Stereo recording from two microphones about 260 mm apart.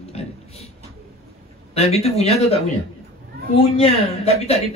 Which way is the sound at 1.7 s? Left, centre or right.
Left.